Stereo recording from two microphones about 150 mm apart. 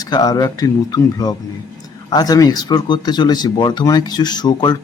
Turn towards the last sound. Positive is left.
turn(degrees=30)  # may be behind; listen again after turning